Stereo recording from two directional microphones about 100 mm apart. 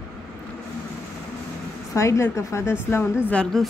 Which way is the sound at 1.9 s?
30° left (ahead or behind).